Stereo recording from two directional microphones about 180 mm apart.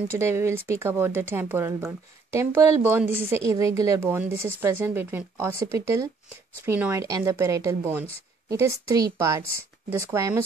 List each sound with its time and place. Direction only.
0.1 s speech: 15° right (ahead or behind)